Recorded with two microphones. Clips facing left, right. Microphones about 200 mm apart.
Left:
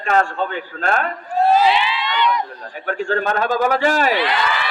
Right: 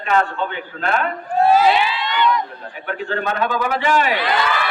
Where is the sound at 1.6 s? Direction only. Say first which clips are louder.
Right 1 dB; 45° right (ahead or behind).